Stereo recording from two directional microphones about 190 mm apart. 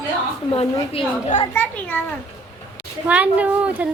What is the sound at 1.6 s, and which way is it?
Speech, 10° left (ahead or behind).